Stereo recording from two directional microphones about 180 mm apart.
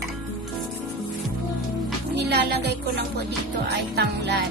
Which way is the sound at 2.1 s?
65° right (ahead or behind).